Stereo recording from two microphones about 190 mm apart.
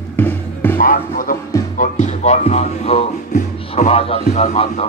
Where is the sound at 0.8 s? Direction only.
50° left (ahead or behind).